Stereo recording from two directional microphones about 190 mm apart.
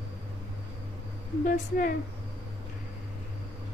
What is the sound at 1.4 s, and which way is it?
Speech, 45° left (ahead or behind).